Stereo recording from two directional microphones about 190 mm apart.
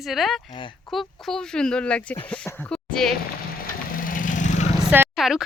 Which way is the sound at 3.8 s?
45° left (ahead or behind).